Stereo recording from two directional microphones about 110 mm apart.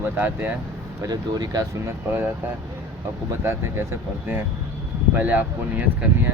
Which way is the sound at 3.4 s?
25° right (ahead or behind).